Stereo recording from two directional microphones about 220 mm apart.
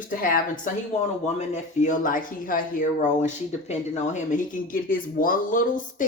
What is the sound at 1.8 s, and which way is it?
Speech, 35° left (ahead or behind).